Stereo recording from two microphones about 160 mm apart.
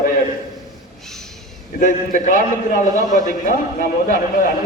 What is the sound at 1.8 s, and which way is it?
A man's voice, 55° left (ahead or behind).